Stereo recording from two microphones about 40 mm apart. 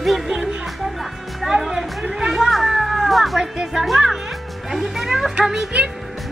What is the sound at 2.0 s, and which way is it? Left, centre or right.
Speech, centre.